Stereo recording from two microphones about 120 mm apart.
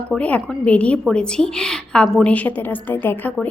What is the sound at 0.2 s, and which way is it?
A woman's voice, 10° left (ahead or behind).